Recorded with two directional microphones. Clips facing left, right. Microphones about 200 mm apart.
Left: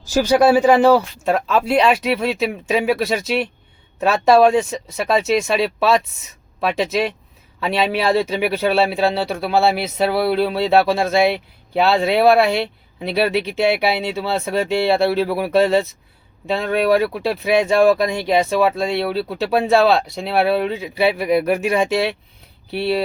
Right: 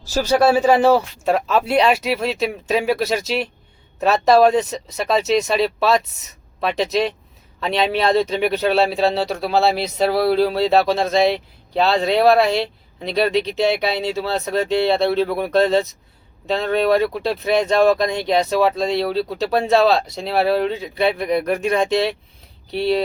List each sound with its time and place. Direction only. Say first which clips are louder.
0.2 s speech: left 2 dB; 15° left (ahead or behind)
0.9 s speech: left 1 dB; 5° right (ahead or behind)